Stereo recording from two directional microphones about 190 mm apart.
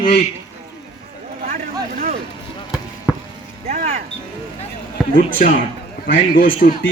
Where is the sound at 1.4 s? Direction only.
45° right (ahead or behind).